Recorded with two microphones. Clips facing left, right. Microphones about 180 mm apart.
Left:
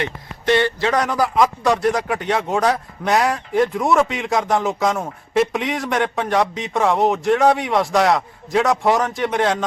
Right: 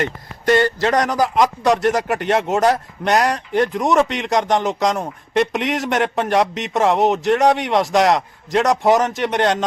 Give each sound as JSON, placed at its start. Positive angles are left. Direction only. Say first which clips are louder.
{"t": 0.0, "sound": "speech", "louder": "right 2 dB", "side_deg": -40}
{"t": 1.0, "sound": "speech", "louder": "right 1 dB", "side_deg": 0}